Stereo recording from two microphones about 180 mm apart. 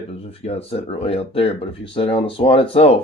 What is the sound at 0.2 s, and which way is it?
Speech, 35° left (ahead or behind).